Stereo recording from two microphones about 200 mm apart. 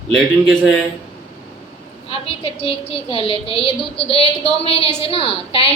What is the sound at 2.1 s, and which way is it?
A woman's voice, 25° left (ahead or behind).